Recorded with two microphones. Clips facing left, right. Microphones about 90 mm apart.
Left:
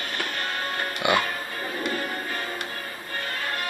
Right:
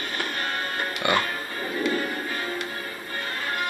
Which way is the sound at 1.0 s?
15° left (ahead or behind).